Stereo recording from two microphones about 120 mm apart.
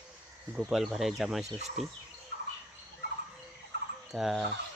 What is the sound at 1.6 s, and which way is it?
Speech, 65° right (ahead or behind).